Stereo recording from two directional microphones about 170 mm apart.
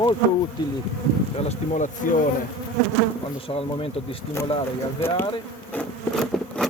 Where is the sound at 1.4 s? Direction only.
45° left (ahead or behind).